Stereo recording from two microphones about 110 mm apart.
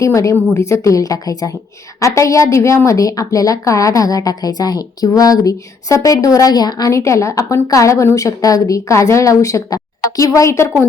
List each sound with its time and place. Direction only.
0.0 s a woman's voice: 30° left (ahead or behind)